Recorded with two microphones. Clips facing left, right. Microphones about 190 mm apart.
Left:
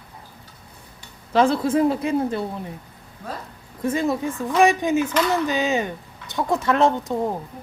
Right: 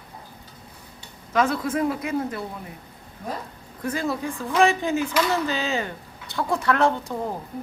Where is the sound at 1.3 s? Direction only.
30° left (ahead or behind).